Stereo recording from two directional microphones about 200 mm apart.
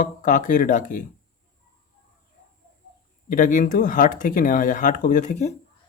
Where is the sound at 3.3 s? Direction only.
40° left (ahead or behind).